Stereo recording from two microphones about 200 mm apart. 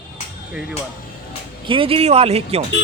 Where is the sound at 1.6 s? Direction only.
25° right (ahead or behind).